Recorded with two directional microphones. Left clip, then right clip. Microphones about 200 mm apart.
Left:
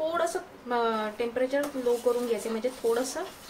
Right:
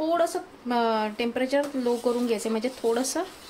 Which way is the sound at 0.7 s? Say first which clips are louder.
Right 3 dB; 45° right (ahead or behind).